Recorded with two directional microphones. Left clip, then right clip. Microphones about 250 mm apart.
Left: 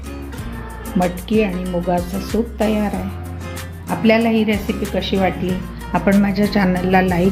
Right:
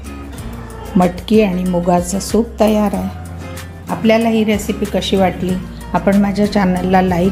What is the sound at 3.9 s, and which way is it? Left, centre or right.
A woman's voice, centre.